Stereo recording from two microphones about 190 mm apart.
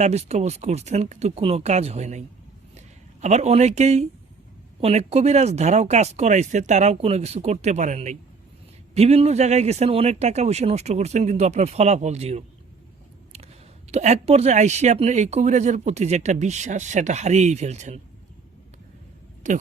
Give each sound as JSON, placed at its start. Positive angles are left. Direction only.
{"t": 0.0, "sound": "speech", "side_deg": -35}
{"t": 13.9, "sound": "speech", "side_deg": -35}
{"t": 19.4, "sound": "speech", "side_deg": -40}